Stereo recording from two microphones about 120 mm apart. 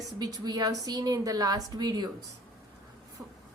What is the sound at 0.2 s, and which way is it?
A woman's voice, 35° right (ahead or behind).